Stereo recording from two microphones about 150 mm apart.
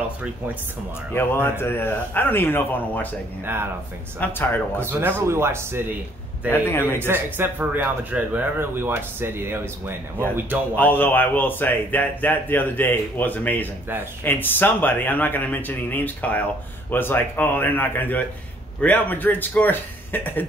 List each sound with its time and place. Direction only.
1.1 s a man's voice: 15° left (ahead or behind)
4.2 s a man's voice: 15° left (ahead or behind)
4.7 s a man's voice: 15° right (ahead or behind)
6.5 s a man's voice: 15° left (ahead or behind)
7.0 s a man's voice: 15° right (ahead or behind)
10.8 s a man's voice: 15° left (ahead or behind)